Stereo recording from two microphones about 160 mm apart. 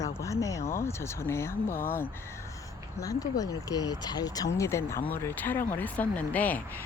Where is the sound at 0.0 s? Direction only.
20° left (ahead or behind).